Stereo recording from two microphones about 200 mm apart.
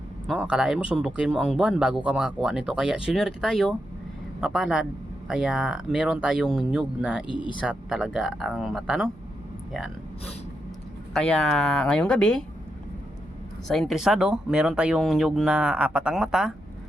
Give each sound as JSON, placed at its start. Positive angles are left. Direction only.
{"t": 0.3, "sound": "speech", "side_deg": -5}
{"t": 7.3, "sound": "speech", "side_deg": 25}
{"t": 7.6, "sound": "speech", "side_deg": -5}
{"t": 11.1, "sound": "speech", "side_deg": 5}
{"t": 13.7, "sound": "speech", "side_deg": 0}